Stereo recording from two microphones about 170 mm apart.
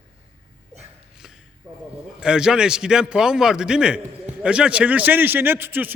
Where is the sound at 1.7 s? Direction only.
25° right (ahead or behind).